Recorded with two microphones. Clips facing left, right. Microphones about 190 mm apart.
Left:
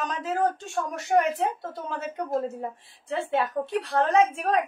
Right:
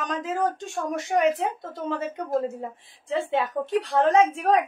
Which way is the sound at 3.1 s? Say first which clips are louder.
Right 1 dB; 15° right (ahead or behind).